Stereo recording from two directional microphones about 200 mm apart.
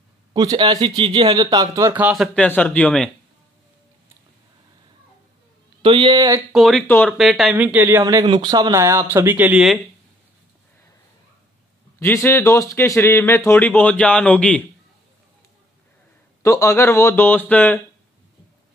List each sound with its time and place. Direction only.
0.3 s speech: 20° right (ahead or behind)
2.3 s speech: 5° left (ahead or behind)
5.8 s speech: 25° right (ahead or behind)
6.5 s speech: 5° left (ahead or behind)
12.0 s speech: 10° left (ahead or behind)
16.4 s speech: 15° left (ahead or behind)